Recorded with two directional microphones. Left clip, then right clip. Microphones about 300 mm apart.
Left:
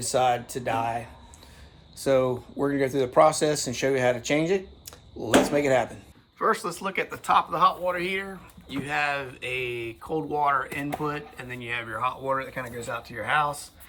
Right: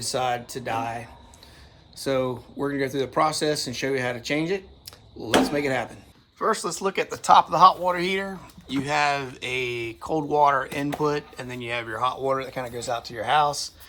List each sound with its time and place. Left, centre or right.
0.0 s speech: centre